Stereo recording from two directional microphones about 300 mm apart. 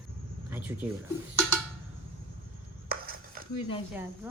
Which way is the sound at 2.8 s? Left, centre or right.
Right.